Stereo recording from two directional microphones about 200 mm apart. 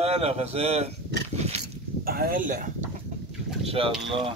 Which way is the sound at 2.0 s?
45° right (ahead or behind).